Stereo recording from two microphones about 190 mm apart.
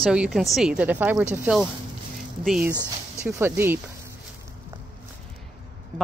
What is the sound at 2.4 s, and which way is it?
Speech, centre (ahead or behind).